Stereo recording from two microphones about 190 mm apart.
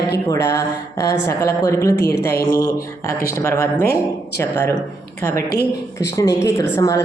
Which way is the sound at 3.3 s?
15° left (ahead or behind).